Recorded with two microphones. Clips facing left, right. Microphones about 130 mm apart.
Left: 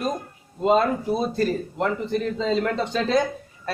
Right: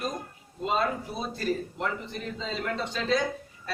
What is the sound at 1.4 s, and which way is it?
A man's voice, 45° left (ahead or behind).